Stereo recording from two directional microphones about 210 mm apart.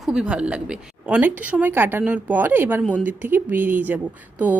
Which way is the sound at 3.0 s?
10° right (ahead or behind).